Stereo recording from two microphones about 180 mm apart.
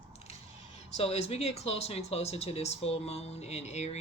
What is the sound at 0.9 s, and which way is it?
Speech, 35° left (ahead or behind).